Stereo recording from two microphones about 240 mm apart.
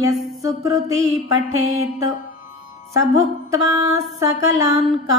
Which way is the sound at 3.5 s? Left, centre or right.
Centre.